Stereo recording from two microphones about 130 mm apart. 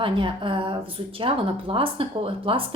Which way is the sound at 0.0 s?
40° right (ahead or behind).